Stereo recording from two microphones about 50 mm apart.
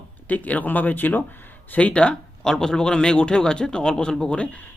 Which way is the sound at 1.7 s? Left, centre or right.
Left.